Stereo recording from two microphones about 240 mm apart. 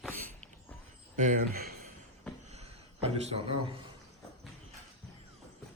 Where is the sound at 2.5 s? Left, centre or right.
Right.